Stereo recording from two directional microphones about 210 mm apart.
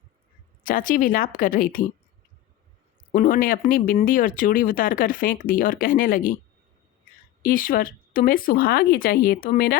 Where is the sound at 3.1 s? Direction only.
40° left (ahead or behind).